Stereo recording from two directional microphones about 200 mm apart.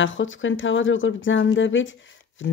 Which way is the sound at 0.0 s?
70° left (ahead or behind).